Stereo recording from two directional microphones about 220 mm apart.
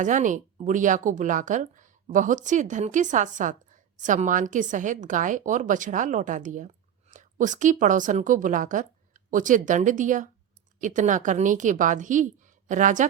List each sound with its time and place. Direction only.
0.0 s a woman's voice: 35° right (ahead or behind)